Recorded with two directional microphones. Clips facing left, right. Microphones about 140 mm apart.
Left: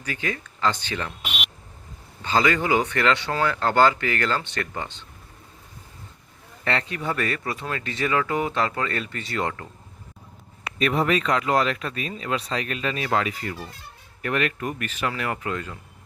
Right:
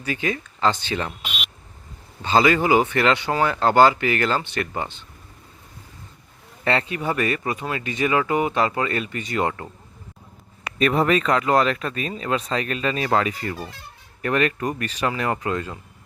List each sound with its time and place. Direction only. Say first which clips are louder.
0.0 s speech: right 4 dB; 15° right (ahead or behind)
2.2 s speech: right 4 dB; 20° right (ahead or behind)
6.7 s speech: right 4 dB; 20° right (ahead or behind)
10.8 s speech: right 3 dB; 45° right (ahead or behind)